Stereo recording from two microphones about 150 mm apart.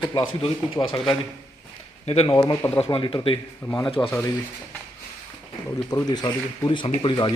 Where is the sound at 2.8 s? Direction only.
35° left (ahead or behind).